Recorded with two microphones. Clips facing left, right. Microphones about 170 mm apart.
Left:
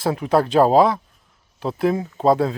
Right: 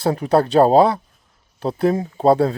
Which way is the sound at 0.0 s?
35° right (ahead or behind).